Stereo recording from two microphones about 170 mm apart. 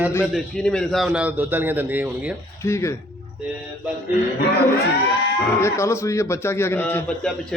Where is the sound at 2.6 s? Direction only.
15° left (ahead or behind).